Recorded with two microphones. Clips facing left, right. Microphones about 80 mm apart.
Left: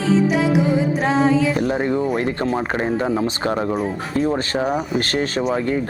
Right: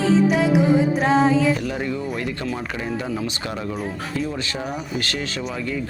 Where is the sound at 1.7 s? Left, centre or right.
Left.